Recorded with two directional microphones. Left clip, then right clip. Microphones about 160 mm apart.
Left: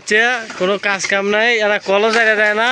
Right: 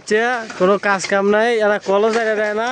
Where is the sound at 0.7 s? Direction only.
40° right (ahead or behind).